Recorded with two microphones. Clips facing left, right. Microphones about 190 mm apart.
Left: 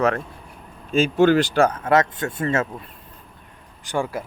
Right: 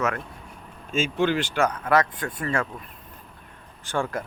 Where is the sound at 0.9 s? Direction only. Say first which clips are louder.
Left 7 dB; 40° left (ahead or behind); by 2.6 s 25° left (ahead or behind).